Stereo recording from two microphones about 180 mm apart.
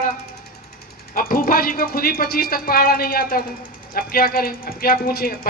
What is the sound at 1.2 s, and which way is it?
Speech, 55° left (ahead or behind).